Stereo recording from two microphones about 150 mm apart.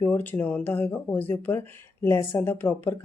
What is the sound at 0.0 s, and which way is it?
Speech, 10° left (ahead or behind).